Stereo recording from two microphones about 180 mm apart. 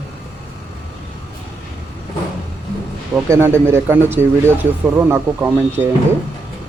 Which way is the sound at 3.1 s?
15° right (ahead or behind).